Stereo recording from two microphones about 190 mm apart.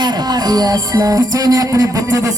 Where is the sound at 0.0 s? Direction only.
20° right (ahead or behind).